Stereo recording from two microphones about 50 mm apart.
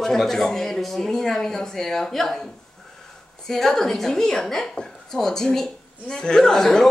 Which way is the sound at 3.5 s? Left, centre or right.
Centre.